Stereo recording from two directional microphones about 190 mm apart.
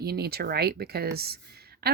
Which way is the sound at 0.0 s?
55° right (ahead or behind).